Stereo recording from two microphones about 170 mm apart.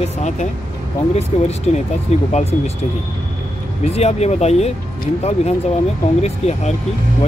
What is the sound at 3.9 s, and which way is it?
Speech, 40° left (ahead or behind).